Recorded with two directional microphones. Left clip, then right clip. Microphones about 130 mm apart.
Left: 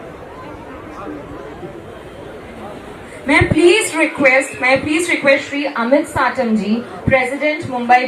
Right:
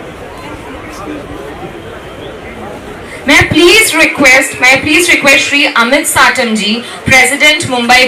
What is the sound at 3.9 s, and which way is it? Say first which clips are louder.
Music: right 7 dB; 45° right (ahead or behind).